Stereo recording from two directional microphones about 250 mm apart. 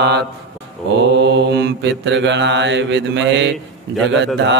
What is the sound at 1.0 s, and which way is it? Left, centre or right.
Mantra, right.